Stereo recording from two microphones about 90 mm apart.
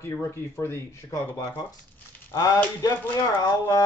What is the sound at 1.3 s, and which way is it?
A man's voice, 45° left (ahead or behind).